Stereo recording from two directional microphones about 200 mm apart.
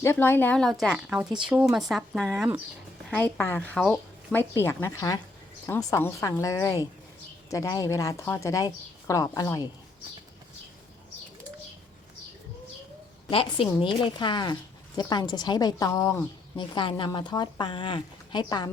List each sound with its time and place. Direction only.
0.0 s a woman's voice: 10° left (ahead or behind)
13.3 s a woman's voice: 25° left (ahead or behind)